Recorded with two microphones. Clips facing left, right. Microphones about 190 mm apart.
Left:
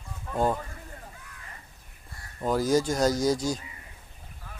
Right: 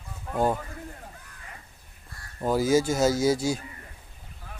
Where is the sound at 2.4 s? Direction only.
5° right (ahead or behind).